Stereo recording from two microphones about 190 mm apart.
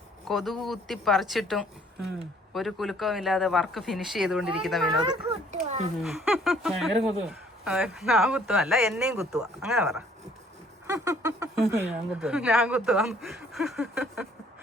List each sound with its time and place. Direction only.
0.3 s speech: centre (ahead or behind)
4.9 s speech: 30° right (ahead or behind)
5.6 s a sound: 35° right (ahead or behind)
6.0 s speech: centre (ahead or behind)
10.8 s a sound: 15° right (ahead or behind)
11.7 s speech: 10° right (ahead or behind)